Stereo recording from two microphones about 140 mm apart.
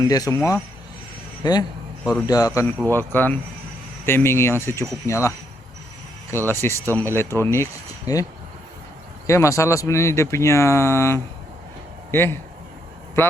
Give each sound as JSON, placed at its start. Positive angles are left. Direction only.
{"t": 0.0, "sound": "speech", "side_deg": 25}
{"t": 2.9, "sound": "speech", "side_deg": 15}
{"t": 6.5, "sound": "speech", "side_deg": 15}